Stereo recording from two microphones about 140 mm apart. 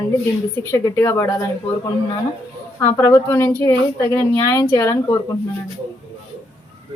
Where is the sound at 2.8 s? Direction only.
20° left (ahead or behind).